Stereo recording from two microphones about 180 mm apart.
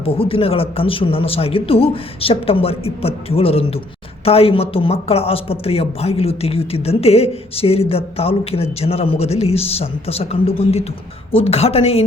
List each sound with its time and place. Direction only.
0.0 s speech: 30° left (ahead or behind)